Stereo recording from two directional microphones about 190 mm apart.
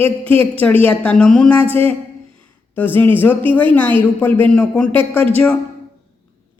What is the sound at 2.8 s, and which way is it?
Speech, 10° left (ahead or behind).